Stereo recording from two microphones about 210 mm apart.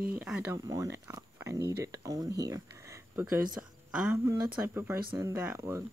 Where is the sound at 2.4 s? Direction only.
15° right (ahead or behind).